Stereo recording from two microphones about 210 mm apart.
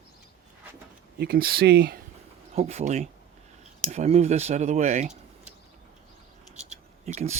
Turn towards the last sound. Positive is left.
turn(degrees=-35)  # may be behind; listen again after turning